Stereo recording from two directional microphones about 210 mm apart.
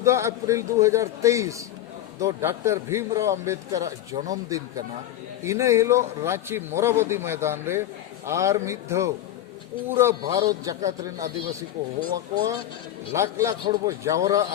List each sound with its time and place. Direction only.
0.0 s a man's voice: 15° right (ahead or behind)